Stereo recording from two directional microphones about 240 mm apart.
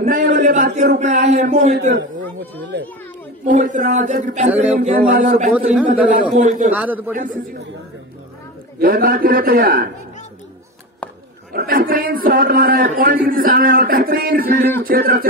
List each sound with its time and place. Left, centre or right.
0.0 s a sound: right
0.7 s a man's voice: right
2.7 s a child's voice: right
3.4 s a man's voice: right
6.7 s a man's voice: centre
8.7 s a man's voice: right
11.5 s a man's voice: right